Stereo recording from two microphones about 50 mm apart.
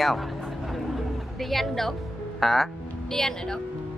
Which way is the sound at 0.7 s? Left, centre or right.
Centre.